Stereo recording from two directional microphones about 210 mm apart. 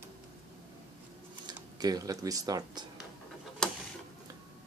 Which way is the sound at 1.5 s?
20° right (ahead or behind).